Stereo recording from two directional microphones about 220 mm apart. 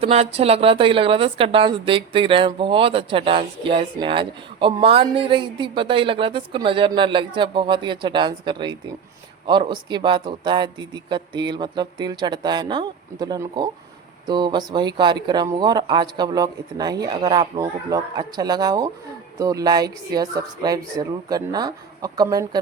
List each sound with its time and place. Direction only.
0.0 s speech: 30° right (ahead or behind)